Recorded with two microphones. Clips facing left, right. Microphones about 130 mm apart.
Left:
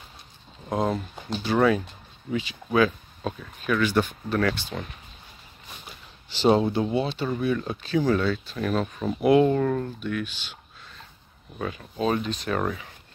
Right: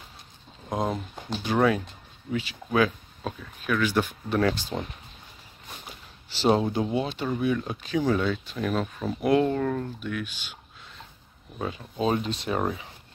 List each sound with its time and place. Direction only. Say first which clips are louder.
0.7 s speech: left 3 dB; centre (ahead or behind)
4.3 s speech: right 4 dB; 20° right (ahead or behind)
6.3 s speech: left 2 dB; centre (ahead or behind)
7.1 s speech: left 1 dB; 10° right (ahead or behind)
11.5 s speech: even; 20° right (ahead or behind)